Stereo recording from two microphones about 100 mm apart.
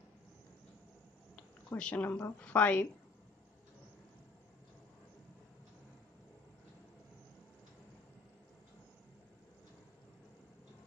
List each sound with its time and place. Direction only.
1.8 s a woman's voice: 15° left (ahead or behind)